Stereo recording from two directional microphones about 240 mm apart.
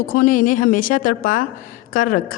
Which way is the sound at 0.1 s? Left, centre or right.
Left.